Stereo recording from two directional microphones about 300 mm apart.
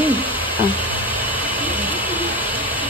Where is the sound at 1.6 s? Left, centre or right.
Centre.